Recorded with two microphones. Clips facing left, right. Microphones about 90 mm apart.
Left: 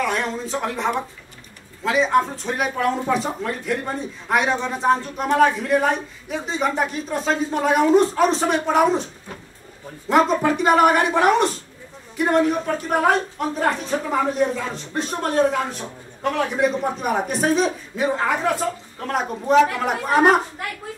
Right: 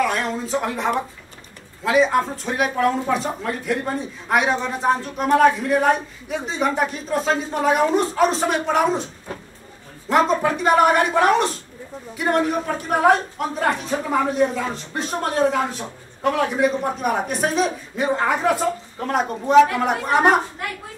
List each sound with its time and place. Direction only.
0.0 s a sound: centre (ahead or behind)
1.9 s speech: centre (ahead or behind)
10.0 s speech: centre (ahead or behind)